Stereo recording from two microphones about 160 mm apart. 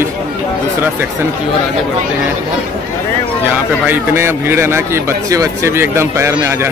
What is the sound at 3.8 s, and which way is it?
Speech, 15° right (ahead or behind).